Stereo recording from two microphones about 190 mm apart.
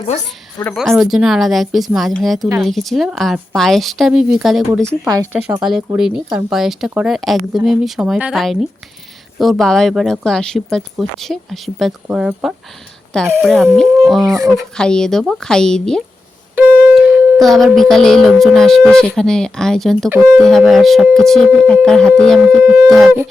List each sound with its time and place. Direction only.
0.0 s a woman's voice: 35° left (ahead or behind)
0.6 s music: 5° left (ahead or behind)
5.0 s speech: 15° right (ahead or behind)
6.0 s music: 5° right (ahead or behind)
16.6 s speech: 10° right (ahead or behind)
16.9 s music: 10° right (ahead or behind)